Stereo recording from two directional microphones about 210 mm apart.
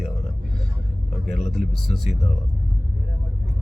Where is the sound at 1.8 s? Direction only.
Centre (ahead or behind).